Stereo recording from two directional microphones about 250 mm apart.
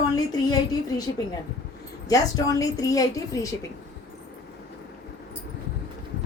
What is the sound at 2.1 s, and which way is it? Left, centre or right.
A woman's voice, centre.